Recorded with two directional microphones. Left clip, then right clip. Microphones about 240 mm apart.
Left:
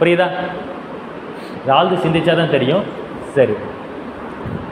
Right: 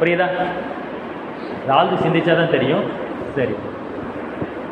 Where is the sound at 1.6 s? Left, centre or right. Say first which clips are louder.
Left 2 dB; left.